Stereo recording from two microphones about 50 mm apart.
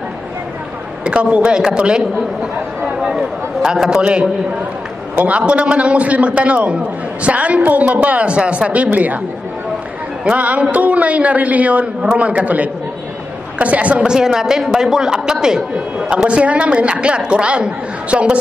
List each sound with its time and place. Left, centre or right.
1.0 s a woman's voice: right
3.2 s a woman's voice: centre; by 9.2 s right
10.2 s a woman's voice: right
14.0 s a woman's voice: centre
16.3 s a woman's voice: right